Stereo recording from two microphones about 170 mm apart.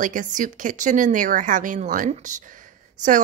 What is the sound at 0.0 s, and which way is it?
A woman's voice, 50° right (ahead or behind).